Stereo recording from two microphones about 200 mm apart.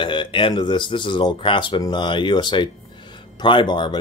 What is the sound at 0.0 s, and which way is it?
Speech, 25° left (ahead or behind).